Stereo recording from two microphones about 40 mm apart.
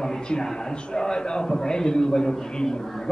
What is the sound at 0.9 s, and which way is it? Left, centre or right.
A man's voice, centre.